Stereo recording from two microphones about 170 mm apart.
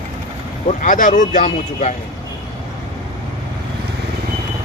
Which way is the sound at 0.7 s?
50° left (ahead or behind).